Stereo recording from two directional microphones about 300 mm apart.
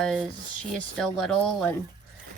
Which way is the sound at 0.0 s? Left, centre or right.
Centre.